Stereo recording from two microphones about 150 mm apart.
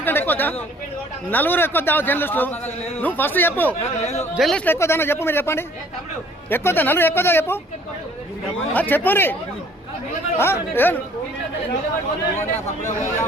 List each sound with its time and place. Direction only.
0.0 s chatter: 15° left (ahead or behind)
1.3 s a man's voice: 10° left (ahead or behind)
4.0 s a man's voice: 45° left (ahead or behind)
4.4 s speech: centre (ahead or behind)
4.6 s a man's voice: 15° left (ahead or behind)
8.7 s a man's voice: 10° left (ahead or behind)
10.3 s a man's voice: 15° left (ahead or behind)